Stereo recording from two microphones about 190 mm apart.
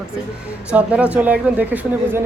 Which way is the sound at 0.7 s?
5° right (ahead or behind).